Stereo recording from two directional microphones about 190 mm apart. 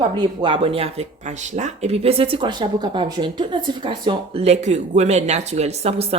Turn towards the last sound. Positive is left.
turn(degrees=-30)  # may be behind; listen again after turning